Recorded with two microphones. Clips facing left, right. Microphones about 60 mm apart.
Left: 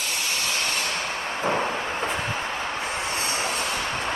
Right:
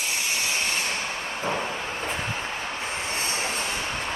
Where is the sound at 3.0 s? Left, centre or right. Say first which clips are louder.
Left 1 dB; left.